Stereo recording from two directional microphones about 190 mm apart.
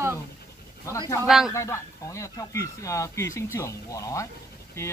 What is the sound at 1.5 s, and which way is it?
Speech, 15° left (ahead or behind).